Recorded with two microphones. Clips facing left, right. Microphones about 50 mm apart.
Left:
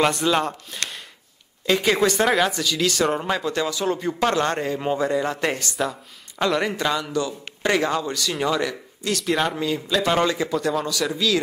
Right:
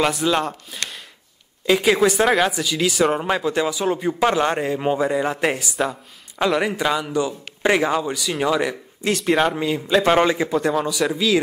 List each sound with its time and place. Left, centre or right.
0.0 s speech: centre
2.6 s speech: centre
9.0 s a man's voice: right
9.3 s speech: centre
9.8 s a man's voice: right